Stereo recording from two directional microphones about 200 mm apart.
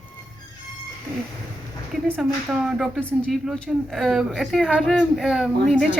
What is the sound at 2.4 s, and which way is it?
Speech, 5° right (ahead or behind).